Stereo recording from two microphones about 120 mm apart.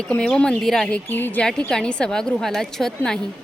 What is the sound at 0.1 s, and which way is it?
A woman's voice, 10° left (ahead or behind).